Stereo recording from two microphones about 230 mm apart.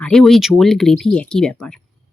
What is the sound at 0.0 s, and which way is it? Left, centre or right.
Speech, centre.